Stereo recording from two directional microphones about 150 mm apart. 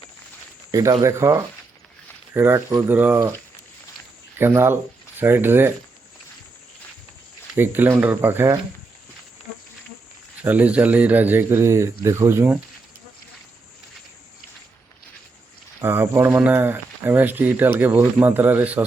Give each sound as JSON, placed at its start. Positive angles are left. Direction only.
{"t": 0.7, "sound": "speech", "side_deg": -20}
{"t": 4.4, "sound": "speech", "side_deg": -15}
{"t": 7.5, "sound": "speech", "side_deg": -15}
{"t": 10.4, "sound": "speech", "side_deg": -10}
{"t": 15.8, "sound": "speech", "side_deg": -15}